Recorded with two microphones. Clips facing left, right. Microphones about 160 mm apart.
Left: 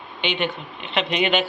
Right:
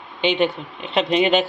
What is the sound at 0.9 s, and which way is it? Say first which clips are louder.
Speech: right 4 dB; 35° right (ahead or behind).